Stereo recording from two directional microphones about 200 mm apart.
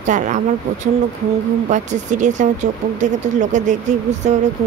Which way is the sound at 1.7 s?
40° right (ahead or behind).